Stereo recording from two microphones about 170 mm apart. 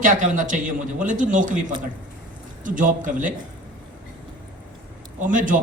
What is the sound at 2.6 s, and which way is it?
Speech, 50° right (ahead or behind).